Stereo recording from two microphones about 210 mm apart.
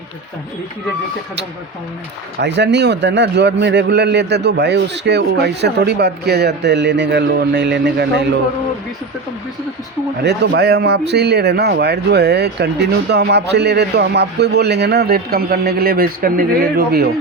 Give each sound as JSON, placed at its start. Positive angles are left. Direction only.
{"t": 2.4, "sound": "speech", "side_deg": -55}
{"t": 10.2, "sound": "speech", "side_deg": -55}